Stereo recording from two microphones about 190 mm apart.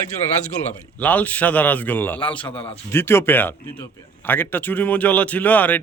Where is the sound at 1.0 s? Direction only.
10° left (ahead or behind).